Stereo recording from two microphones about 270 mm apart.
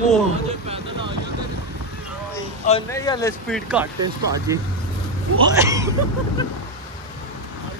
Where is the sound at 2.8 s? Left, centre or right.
Centre.